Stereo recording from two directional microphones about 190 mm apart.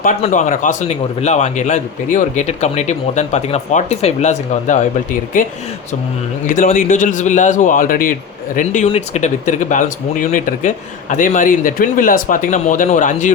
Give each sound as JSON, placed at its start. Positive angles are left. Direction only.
{"t": 0.2, "sound": "a man's voice", "side_deg": 40}
{"t": 6.5, "sound": "a man's voice", "side_deg": 45}